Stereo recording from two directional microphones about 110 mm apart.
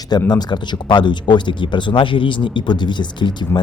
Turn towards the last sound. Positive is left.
turn(degrees=45)  # may be behind; listen again after turning